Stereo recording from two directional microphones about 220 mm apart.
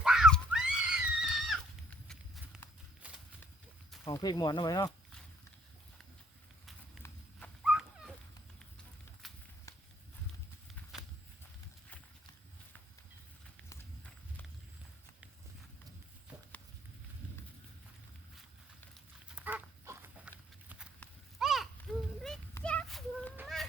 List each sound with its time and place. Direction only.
0.0 s a sound: centre (ahead or behind)
4.0 s speech: 20° left (ahead or behind)
7.3 s dog: centre (ahead or behind)
19.3 s dog: 5° right (ahead or behind)
21.0 s clip-clop: centre (ahead or behind)
21.9 s a sound: 5° left (ahead or behind)